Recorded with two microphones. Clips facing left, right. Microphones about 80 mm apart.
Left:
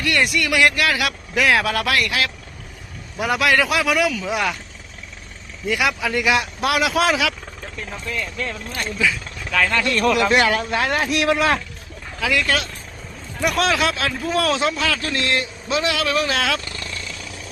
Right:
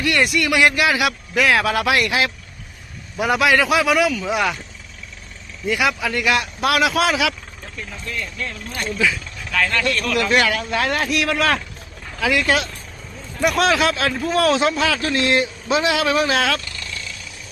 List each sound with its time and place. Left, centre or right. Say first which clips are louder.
0.0 s a man's voice: right 1 dB; centre
3.2 s a man's voice: right 2 dB; centre
5.6 s a man's voice: right 1 dB; centre
6.1 s a man's voice: left 1 dB; centre
10.1 s speech: left 2 dB; left
10.8 s speech: even; centre
12.2 s a man's voice: right 2 dB; centre
16.3 s a man's voice: right 2 dB; centre